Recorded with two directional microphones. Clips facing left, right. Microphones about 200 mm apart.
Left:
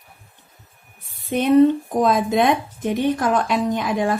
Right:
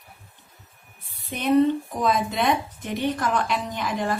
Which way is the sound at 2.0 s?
50° left (ahead or behind).